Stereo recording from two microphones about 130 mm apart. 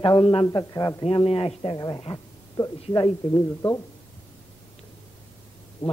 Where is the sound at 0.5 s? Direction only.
30° left (ahead or behind).